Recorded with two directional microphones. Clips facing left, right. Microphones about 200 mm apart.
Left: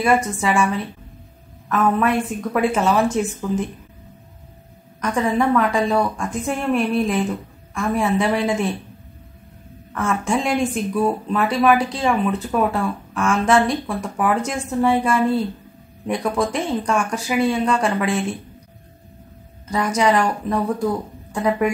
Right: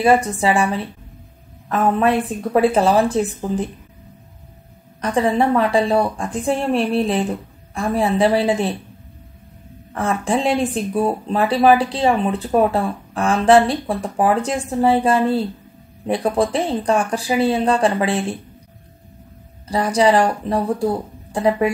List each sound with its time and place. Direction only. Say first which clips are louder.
0.0 s speech: right 3 dB; 35° right (ahead or behind)
5.0 s speech: right 2 dB; 35° right (ahead or behind)
9.9 s speech: right 1 dB; 35° right (ahead or behind)
19.7 s speech: right 3 dB; 30° right (ahead or behind)